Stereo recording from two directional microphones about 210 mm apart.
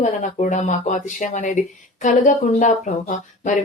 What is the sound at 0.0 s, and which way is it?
Speech, 35° left (ahead or behind).